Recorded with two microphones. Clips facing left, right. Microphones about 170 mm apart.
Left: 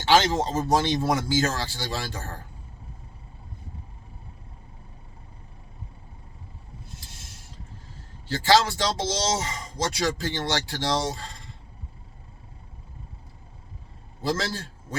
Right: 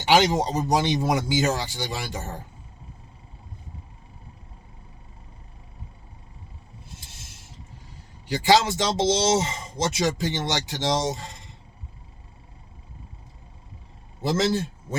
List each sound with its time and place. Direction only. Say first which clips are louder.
0.0 s speech: right 1 dB; 15° right (ahead or behind)
8.3 s speech: right 1 dB; 15° right (ahead or behind)
14.2 s a man's voice: right 5 dB; 20° right (ahead or behind)